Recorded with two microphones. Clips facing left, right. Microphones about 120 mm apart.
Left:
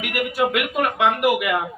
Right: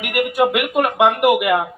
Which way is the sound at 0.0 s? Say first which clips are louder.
Right 4 dB; 55° right (ahead or behind).